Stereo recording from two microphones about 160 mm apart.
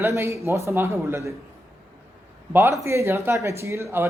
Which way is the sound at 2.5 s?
15° right (ahead or behind).